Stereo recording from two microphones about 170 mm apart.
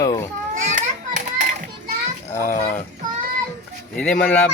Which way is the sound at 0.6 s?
45° right (ahead or behind).